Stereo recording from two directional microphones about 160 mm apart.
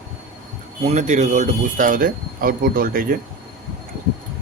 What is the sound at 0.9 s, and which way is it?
Speech, 50° right (ahead or behind).